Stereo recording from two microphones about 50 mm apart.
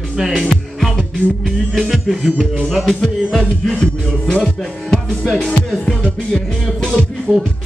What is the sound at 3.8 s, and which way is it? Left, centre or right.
Music, centre.